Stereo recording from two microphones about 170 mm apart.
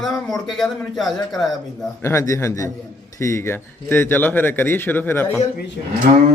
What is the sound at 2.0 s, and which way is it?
A man's voice, 15° left (ahead or behind).